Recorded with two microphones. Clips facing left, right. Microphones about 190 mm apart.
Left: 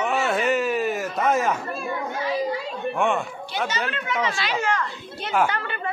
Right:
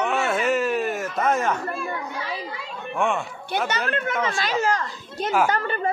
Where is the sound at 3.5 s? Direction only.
55° right (ahead or behind); by 5.3 s 40° right (ahead or behind).